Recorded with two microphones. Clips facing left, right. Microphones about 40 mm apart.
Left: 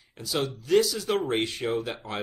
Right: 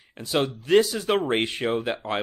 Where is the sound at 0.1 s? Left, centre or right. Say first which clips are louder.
Right 4 dB; right.